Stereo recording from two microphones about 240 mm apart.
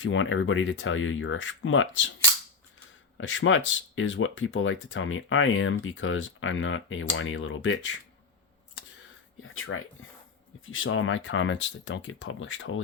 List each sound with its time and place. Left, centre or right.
0.0 s speech: left
3.2 s speech: left
9.4 s speech: left